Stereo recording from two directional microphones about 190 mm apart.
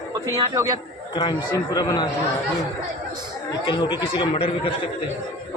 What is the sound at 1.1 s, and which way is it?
Speech, 25° left (ahead or behind).